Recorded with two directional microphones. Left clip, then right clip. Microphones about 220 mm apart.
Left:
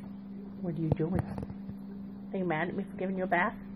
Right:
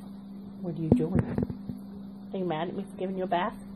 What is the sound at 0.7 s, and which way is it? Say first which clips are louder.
Speech: right 6 dB; 5° right (ahead or behind).